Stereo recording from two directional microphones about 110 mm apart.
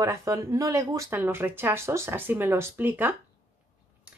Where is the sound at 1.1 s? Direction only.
20° right (ahead or behind).